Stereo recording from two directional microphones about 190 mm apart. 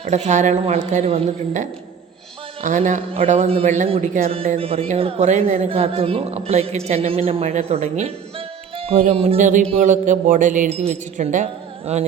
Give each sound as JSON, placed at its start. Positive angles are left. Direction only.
{"t": 0.0, "sound": "a woman's voice", "side_deg": -35}
{"t": 4.4, "sound": "a woman's voice", "side_deg": -30}